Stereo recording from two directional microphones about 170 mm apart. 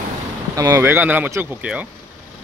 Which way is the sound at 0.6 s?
20° right (ahead or behind).